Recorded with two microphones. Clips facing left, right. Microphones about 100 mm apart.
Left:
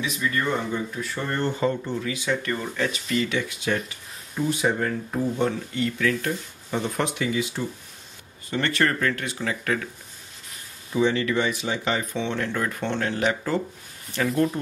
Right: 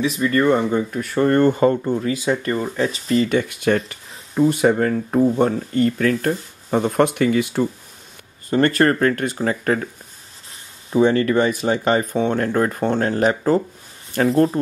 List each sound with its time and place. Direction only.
0.0 s speech: 45° right (ahead or behind)
8.5 s speech: 45° right (ahead or behind)
11.0 s speech: 45° right (ahead or behind)